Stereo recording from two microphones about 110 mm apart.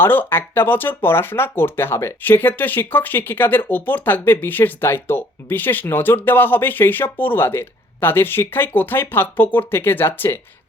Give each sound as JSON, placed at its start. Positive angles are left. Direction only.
{"t": 0.0, "sound": "speech", "side_deg": 20}